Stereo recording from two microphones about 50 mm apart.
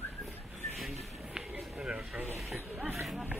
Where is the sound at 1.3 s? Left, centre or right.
Centre.